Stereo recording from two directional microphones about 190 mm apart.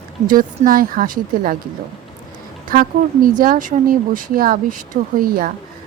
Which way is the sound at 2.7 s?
45° right (ahead or behind).